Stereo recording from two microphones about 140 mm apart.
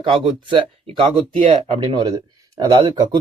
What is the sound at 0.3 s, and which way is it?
Speech, 40° right (ahead or behind).